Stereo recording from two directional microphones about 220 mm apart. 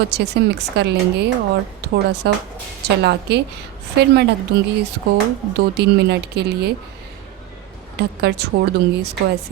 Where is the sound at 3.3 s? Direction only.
50° right (ahead or behind).